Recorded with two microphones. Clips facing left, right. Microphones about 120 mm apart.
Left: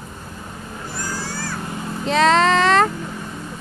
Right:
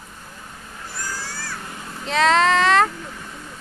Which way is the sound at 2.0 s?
Centre (ahead or behind).